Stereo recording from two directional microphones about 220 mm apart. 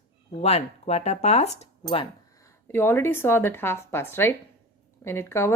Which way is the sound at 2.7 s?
10° left (ahead or behind).